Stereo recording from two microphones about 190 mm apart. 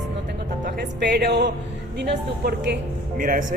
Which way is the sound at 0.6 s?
55° right (ahead or behind).